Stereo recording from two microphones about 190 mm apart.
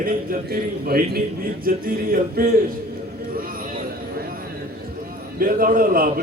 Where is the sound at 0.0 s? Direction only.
50° right (ahead or behind).